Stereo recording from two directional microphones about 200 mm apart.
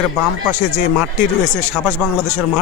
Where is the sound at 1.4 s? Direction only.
15° right (ahead or behind).